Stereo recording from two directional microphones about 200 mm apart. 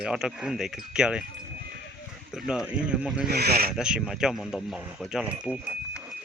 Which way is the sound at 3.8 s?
5° right (ahead or behind).